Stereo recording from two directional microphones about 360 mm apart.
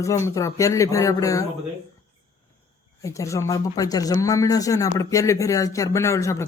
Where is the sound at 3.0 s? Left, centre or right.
Centre.